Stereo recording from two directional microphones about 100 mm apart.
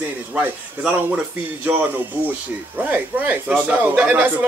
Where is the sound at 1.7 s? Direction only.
15° right (ahead or behind).